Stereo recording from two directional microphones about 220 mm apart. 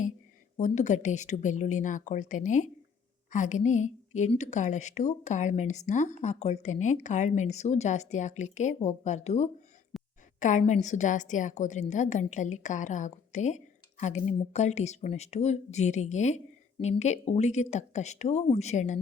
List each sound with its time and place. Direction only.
0.5 s a woman's voice: 35° left (ahead or behind)
9.9 s a sound: centre (ahead or behind)
10.4 s a woman's voice: 35° left (ahead or behind)